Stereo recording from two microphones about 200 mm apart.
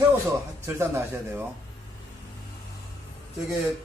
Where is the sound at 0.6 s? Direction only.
15° right (ahead or behind).